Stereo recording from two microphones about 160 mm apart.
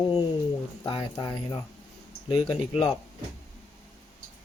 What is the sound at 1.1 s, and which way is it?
Speech, 25° left (ahead or behind).